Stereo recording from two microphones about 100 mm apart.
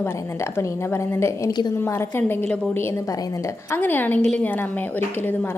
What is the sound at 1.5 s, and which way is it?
Speech, 45° left (ahead or behind).